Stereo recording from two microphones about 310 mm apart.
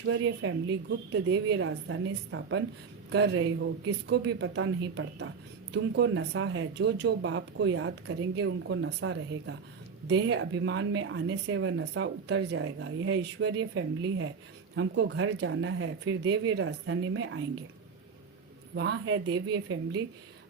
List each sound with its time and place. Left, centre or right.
0.1 s speech: right
18.7 s speech: right